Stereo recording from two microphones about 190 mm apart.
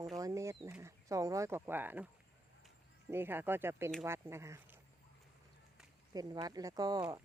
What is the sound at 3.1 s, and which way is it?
Speech, 10° right (ahead or behind).